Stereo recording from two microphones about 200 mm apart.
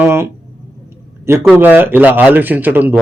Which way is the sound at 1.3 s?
10° right (ahead or behind).